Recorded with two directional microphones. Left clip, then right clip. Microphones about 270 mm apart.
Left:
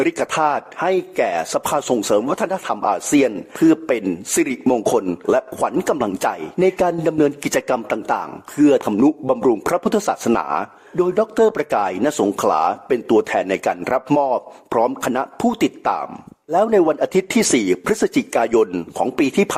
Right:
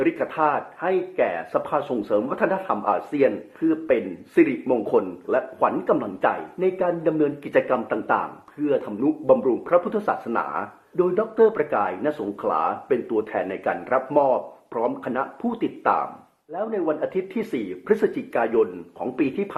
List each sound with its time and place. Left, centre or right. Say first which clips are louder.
0.0 s speech: left 4 dB; left
4.9 s speech: left 4 dB; left